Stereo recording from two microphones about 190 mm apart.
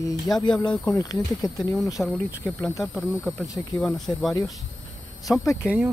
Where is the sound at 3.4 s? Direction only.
15° left (ahead or behind).